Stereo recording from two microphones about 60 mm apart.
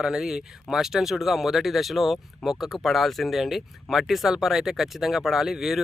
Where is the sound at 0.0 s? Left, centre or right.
Centre.